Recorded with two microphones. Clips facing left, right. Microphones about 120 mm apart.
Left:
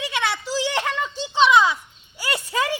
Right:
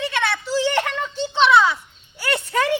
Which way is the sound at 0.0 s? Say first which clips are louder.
Right 2 dB; 15° left (ahead or behind).